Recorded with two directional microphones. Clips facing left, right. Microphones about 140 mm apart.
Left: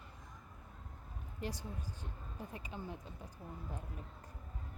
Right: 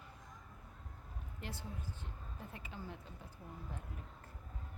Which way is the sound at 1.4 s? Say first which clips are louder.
Left 4 dB; 15° left (ahead or behind).